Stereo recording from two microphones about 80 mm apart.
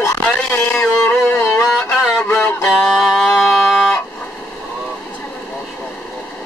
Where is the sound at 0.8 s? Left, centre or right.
Left.